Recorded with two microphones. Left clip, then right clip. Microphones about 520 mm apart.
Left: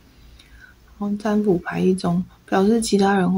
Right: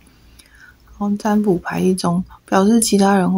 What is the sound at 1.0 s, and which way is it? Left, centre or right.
Speech, right.